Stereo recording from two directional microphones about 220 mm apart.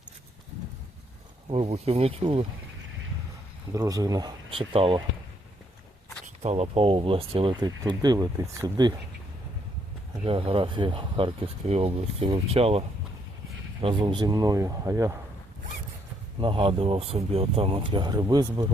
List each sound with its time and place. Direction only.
1.5 s speech: 30° right (ahead or behind)
3.7 s speech: 15° right (ahead or behind)
6.4 s speech: 30° right (ahead or behind)
10.2 s speech: 25° right (ahead or behind)
13.8 s speech: 20° right (ahead or behind)
16.4 s speech: 20° right (ahead or behind)